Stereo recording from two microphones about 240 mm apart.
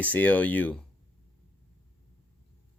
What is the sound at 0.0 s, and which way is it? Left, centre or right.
Speech, centre.